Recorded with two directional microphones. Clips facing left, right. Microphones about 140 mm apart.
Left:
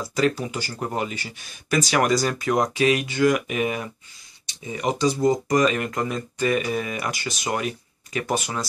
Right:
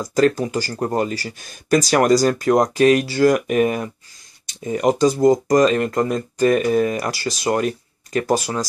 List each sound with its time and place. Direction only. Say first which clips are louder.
0.0 s speech: right 6 dB; 40° right (ahead or behind)